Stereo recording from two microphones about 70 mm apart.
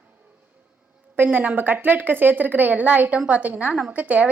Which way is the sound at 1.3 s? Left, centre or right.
Right.